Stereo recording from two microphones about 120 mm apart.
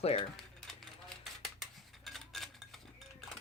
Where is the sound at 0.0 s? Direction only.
60° left (ahead or behind).